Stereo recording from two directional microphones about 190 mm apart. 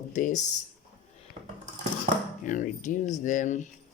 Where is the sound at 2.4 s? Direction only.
40° left (ahead or behind).